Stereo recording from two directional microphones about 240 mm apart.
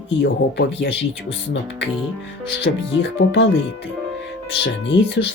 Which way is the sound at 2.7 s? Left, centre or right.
Left.